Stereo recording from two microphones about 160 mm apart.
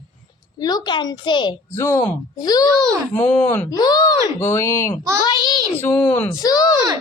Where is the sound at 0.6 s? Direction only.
25° left (ahead or behind).